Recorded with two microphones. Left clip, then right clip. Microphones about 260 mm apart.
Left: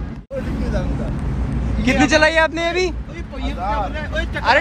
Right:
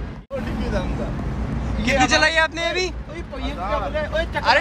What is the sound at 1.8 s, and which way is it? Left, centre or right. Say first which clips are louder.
A man's voice: left 3 dB; centre.